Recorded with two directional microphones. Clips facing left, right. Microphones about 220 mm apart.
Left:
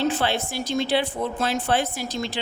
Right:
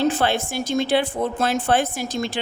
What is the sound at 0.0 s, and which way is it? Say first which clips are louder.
Speech: right 3 dB; 45° right (ahead or behind).